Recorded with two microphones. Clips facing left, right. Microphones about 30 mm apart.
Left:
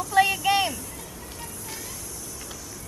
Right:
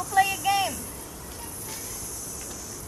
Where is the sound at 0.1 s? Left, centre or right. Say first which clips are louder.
Left 2 dB; left.